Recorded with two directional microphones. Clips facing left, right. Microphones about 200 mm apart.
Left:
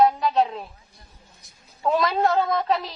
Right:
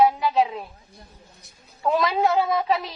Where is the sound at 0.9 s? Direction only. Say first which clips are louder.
Right 5 dB; 60° right (ahead or behind).